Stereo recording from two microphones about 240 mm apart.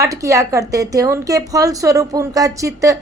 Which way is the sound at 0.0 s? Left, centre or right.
Centre.